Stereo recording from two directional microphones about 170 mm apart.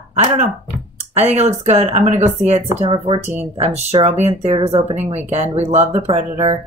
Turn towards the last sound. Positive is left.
turn(degrees=-40)  # may be behind; listen again after turning